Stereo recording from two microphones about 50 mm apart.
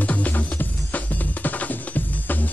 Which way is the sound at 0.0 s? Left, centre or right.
Left.